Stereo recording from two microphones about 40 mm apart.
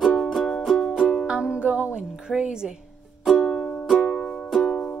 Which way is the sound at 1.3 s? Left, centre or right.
Right.